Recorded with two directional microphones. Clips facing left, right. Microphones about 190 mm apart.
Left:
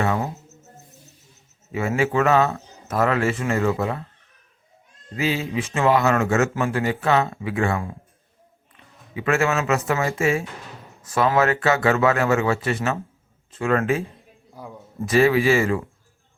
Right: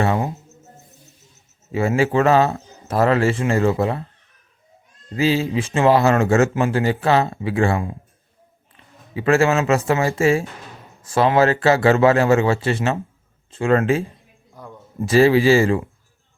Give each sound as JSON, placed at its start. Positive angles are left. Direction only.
{"t": 0.0, "sound": "speech", "side_deg": -30}
{"t": 1.7, "sound": "speech", "side_deg": -30}
{"t": 5.1, "sound": "speech", "side_deg": -30}
{"t": 9.1, "sound": "speech", "side_deg": -30}
{"t": 14.6, "sound": "a man's voice", "side_deg": 5}
{"t": 15.0, "sound": "speech", "side_deg": -30}